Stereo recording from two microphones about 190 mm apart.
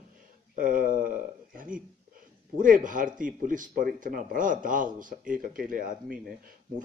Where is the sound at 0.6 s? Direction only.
45° right (ahead or behind).